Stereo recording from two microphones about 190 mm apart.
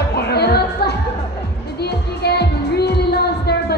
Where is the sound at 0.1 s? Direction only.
60° left (ahead or behind).